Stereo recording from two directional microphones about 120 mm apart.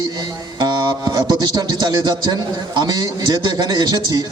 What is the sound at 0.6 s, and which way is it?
A man's voice, 30° right (ahead or behind).